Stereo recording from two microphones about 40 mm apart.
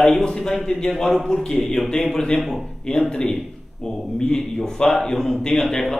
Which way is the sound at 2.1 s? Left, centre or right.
Left.